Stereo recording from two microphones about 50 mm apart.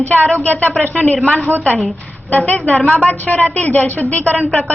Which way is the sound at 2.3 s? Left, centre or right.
Left.